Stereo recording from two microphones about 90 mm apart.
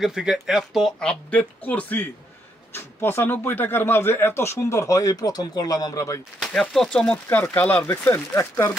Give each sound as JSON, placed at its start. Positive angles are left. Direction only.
{"t": 0.0, "sound": "speech", "side_deg": -5}
{"t": 6.6, "sound": "speech", "side_deg": 0}
{"t": 6.9, "sound": "speech", "side_deg": 15}
{"t": 8.1, "sound": "speech", "side_deg": 30}